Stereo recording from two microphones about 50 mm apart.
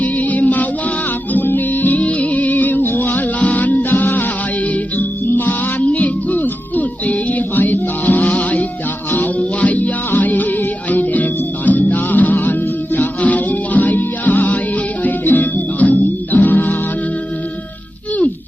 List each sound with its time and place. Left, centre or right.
0.0 s music: left